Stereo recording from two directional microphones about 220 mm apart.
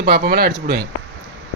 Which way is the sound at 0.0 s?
45° right (ahead or behind).